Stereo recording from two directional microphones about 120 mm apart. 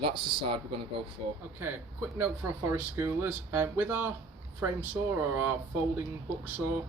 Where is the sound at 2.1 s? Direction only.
15° right (ahead or behind).